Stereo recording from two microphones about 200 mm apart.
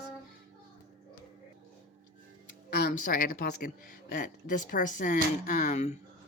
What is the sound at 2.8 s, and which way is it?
Speech, 45° left (ahead or behind).